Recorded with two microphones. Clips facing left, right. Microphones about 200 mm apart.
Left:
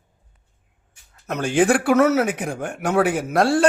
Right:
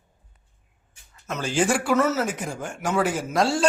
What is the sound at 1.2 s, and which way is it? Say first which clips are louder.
Speech: left 5 dB; 60° left (ahead or behind).